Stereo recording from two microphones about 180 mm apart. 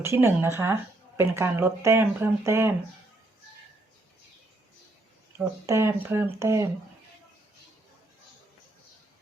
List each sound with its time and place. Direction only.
0.0 s speech: 15° right (ahead or behind)
5.4 s speech: 15° right (ahead or behind)